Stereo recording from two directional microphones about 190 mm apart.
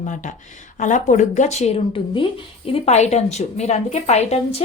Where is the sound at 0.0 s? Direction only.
40° left (ahead or behind).